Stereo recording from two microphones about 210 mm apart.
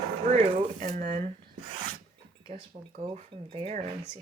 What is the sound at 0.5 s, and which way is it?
Speech, 30° right (ahead or behind).